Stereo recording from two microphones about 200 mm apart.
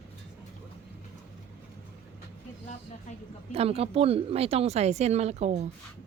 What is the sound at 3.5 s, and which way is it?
Speech, 30° right (ahead or behind).